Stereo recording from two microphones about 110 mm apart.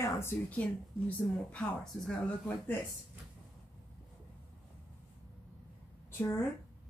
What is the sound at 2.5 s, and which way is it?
Speech, 20° left (ahead or behind).